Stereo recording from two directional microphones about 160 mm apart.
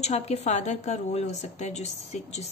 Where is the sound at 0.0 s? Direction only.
40° left (ahead or behind).